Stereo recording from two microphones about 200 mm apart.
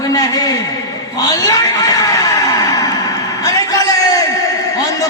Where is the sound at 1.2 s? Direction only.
20° left (ahead or behind).